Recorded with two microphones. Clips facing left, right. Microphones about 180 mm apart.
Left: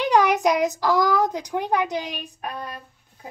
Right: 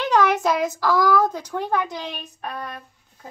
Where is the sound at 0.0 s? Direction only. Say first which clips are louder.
Left 1 dB; 15° left (ahead or behind).